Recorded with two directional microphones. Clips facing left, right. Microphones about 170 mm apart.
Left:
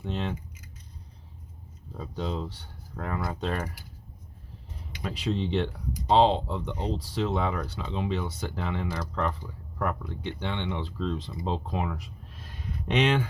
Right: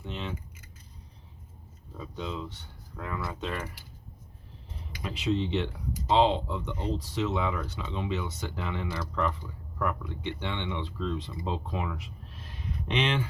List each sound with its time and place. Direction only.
0.0 s speech: 40° left (ahead or behind)
2.0 s speech: 40° left (ahead or behind)
5.0 s speech: 35° left (ahead or behind)